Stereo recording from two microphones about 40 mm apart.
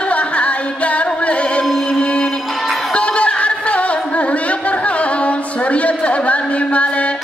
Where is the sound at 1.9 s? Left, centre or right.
Centre.